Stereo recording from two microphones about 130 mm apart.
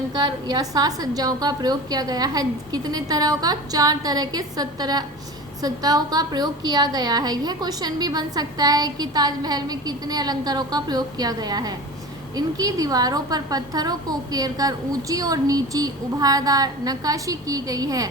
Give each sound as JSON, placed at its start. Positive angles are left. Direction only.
{"t": 0.1, "sound": "a woman's voice", "side_deg": -30}